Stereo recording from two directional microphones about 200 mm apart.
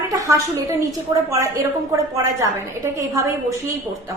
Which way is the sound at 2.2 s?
15° right (ahead or behind).